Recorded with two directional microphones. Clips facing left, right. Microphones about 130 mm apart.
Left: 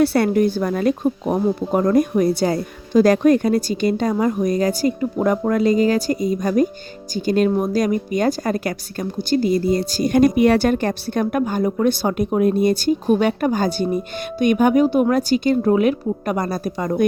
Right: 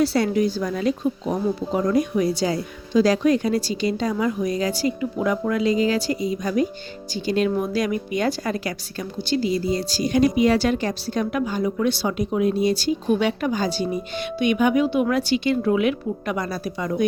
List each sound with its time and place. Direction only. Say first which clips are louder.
0.0 s speech: left 4 dB; 55° left (ahead or behind)